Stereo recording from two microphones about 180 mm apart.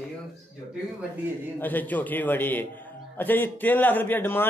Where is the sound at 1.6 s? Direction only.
10° left (ahead or behind).